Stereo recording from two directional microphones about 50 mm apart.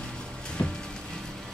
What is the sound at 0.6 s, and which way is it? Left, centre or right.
Music, left.